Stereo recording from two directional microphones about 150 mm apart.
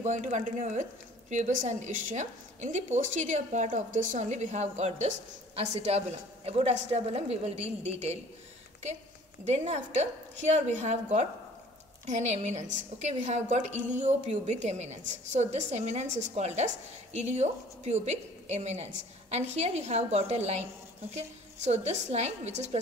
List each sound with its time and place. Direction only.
0.0 s a woman's voice: 50° right (ahead or behind)
9.4 s a woman's voice: 50° right (ahead or behind)